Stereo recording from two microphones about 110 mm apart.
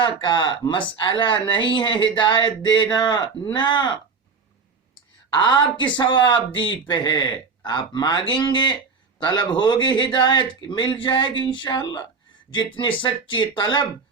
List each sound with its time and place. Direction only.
0.0 s speech: 45° left (ahead or behind)
5.3 s speech: 45° left (ahead or behind)